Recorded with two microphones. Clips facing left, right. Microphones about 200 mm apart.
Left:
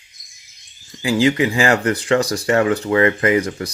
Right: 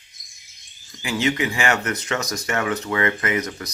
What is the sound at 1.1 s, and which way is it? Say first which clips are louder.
Speech: left 7 dB; 30° left (ahead or behind).